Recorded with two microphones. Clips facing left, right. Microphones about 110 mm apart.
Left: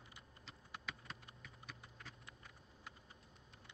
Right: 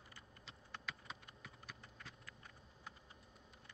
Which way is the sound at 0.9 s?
Centre (ahead or behind).